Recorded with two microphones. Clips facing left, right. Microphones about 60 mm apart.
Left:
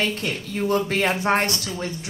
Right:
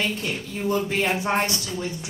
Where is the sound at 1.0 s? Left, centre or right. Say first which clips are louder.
Left 3 dB; left.